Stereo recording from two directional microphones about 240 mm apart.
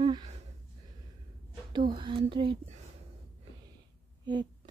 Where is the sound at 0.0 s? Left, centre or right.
Right.